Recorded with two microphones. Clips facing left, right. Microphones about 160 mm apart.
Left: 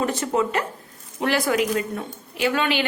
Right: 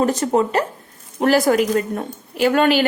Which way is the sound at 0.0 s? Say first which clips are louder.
Right 5 dB; 40° right (ahead or behind).